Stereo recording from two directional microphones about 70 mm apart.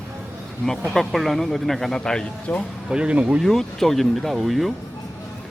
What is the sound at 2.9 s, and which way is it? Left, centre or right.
Speech, centre.